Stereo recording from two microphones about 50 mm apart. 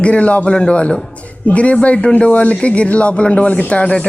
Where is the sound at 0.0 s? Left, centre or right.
Left.